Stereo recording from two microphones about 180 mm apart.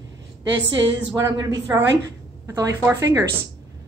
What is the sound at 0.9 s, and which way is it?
A woman's voice, 20° right (ahead or behind).